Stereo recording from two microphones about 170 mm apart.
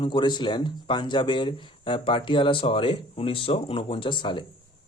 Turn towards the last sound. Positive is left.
turn(degrees=30)  # may be behind; listen again after turning